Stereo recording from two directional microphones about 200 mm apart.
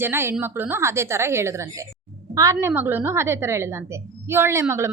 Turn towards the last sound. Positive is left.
turn(degrees=-15)  # may be behind; listen again after turning